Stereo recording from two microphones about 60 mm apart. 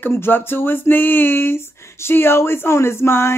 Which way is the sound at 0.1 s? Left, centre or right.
Left.